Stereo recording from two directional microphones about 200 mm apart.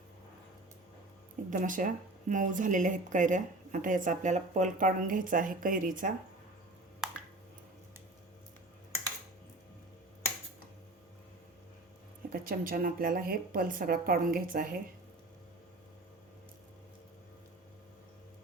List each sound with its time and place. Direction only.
1.5 s a woman's voice: 40° right (ahead or behind)
12.3 s a woman's voice: 45° right (ahead or behind)